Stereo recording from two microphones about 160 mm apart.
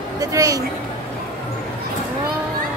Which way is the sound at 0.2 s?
20° right (ahead or behind).